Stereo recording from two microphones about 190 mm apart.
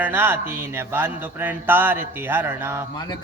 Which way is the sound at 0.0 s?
10° right (ahead or behind).